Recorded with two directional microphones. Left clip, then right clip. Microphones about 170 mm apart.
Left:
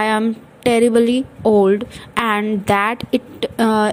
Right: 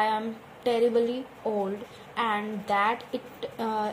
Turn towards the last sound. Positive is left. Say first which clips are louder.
# left 13 dB
turn(degrees=45)  # may be behind; listen again after turning